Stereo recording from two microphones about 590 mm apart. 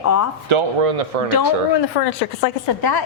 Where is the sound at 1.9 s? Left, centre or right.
Left.